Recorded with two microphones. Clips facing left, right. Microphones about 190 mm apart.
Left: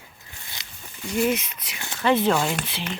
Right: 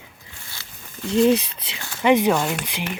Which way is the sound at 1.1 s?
30° right (ahead or behind).